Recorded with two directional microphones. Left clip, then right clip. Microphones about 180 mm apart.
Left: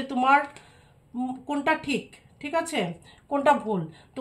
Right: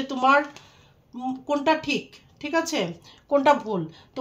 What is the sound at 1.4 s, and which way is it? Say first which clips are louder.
Speech: right 4 dB; 40° right (ahead or behind).